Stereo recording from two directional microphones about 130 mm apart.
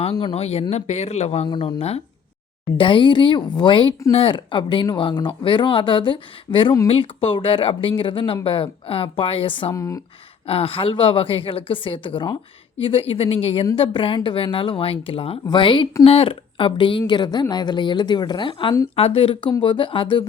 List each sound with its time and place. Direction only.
0.0 s speech: 45° left (ahead or behind)
1.5 s speech: 45° left (ahead or behind)
2.7 s speech: 40° left (ahead or behind)
9.7 s speech: 25° left (ahead or behind)
10.4 s speech: 45° left (ahead or behind)